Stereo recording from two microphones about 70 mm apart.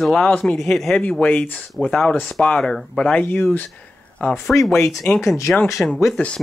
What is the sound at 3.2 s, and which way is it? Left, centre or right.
Speech, left.